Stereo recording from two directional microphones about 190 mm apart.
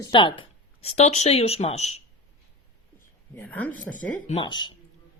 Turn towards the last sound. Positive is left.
turn(degrees=25)  # may be behind; listen again after turning